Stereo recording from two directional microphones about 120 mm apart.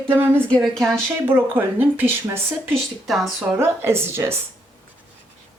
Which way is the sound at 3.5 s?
20° right (ahead or behind).